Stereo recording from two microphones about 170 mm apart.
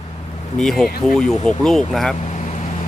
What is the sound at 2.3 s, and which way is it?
Vehicle, 45° left (ahead or behind).